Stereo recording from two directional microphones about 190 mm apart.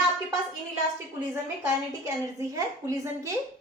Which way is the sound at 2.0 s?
15° right (ahead or behind).